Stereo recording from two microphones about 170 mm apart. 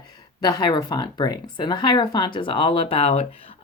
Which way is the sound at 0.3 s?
25° left (ahead or behind).